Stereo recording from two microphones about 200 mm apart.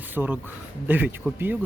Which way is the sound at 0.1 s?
10° right (ahead or behind).